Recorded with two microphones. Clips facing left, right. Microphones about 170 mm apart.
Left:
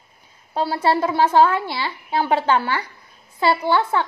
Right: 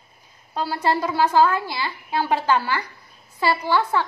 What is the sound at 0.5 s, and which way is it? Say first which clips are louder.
A woman's voice: left 3 dB; 25° left (ahead or behind).